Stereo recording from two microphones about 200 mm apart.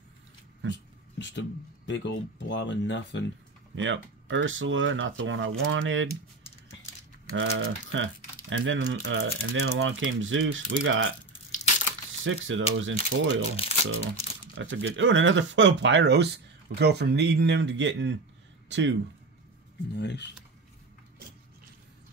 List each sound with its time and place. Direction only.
1.1 s a sound: 65° left (ahead or behind)
1.9 s speech: 65° left (ahead or behind)
3.7 s speech: 70° right (ahead or behind)
7.2 s speech: 75° right (ahead or behind)
12.2 s speech: 75° right (ahead or behind)
13.6 s speech: 30° left (ahead or behind)
14.6 s speech: 70° right (ahead or behind)
19.9 s speech: 60° left (ahead or behind)